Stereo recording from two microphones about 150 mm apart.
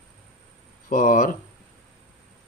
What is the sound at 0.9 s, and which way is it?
Speech, 60° left (ahead or behind).